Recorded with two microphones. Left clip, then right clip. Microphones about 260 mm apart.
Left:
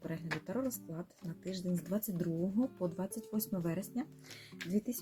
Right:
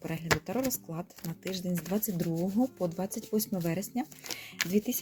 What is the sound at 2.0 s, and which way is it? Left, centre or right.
Speech, right.